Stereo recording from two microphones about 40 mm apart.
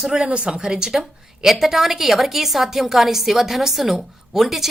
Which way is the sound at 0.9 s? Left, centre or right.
Centre.